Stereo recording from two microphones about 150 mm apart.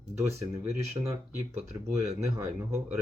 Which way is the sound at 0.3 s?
20° right (ahead or behind).